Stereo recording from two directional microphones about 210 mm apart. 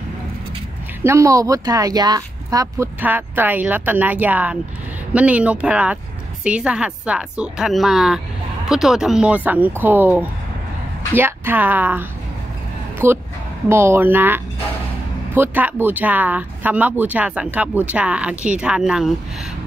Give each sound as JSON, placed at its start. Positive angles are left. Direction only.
{"t": 1.0, "sound": "a woman's voice", "side_deg": -15}